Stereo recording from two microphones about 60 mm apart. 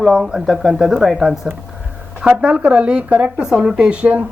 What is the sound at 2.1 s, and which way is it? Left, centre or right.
Speech, centre.